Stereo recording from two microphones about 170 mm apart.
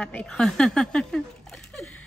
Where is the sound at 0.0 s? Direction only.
5° left (ahead or behind).